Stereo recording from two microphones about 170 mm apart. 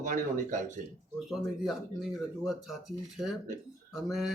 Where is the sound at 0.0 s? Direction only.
50° right (ahead or behind).